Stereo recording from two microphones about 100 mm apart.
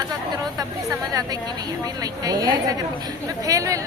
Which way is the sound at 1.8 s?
40° right (ahead or behind).